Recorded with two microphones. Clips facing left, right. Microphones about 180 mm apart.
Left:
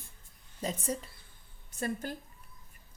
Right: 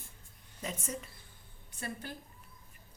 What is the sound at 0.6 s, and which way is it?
Speech, 35° left (ahead or behind).